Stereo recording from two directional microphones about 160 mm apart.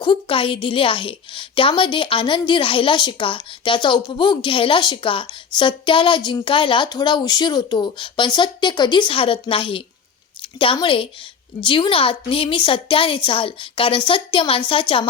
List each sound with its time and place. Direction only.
0.0 s a woman's voice: 30° left (ahead or behind)